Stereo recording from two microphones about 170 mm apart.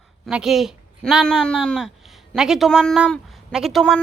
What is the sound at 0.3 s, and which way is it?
Speech, 5° right (ahead or behind).